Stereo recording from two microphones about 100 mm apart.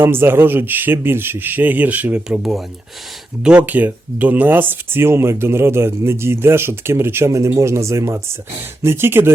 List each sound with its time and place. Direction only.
0.0 s speech: 25° right (ahead or behind)